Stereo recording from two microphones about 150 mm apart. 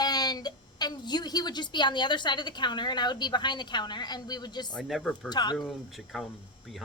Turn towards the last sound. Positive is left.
turn(degrees=0)  # may be behind; listen again after turning